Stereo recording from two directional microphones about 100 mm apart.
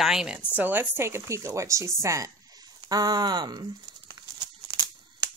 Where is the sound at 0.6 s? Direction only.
20° right (ahead or behind).